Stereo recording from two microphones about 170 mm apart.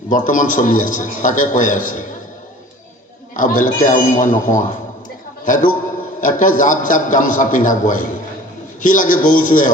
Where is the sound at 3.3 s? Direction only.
50° left (ahead or behind).